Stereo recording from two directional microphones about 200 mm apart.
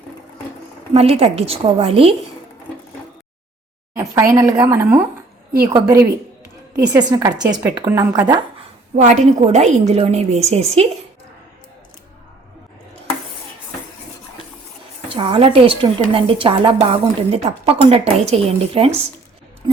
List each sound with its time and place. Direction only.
0.9 s a woman's voice: 30° right (ahead or behind)
4.4 s speech: 15° right (ahead or behind)
9.0 s a woman's voice: 35° right (ahead or behind)
15.1 s a woman's voice: 25° right (ahead or behind)
19.6 s scissors: 20° right (ahead or behind)